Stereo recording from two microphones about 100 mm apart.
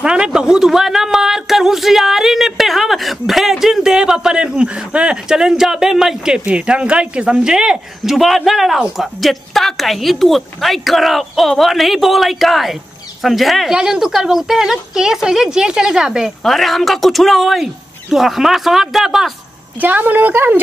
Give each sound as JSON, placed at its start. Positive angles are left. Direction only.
{"t": 0.0, "sound": "speech", "side_deg": -10}
{"t": 19.8, "sound": "speech", "side_deg": -15}